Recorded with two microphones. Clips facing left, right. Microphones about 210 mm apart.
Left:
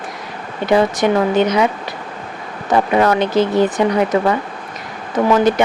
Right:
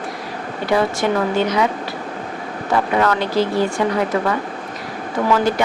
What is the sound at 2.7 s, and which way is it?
Speech, 20° left (ahead or behind).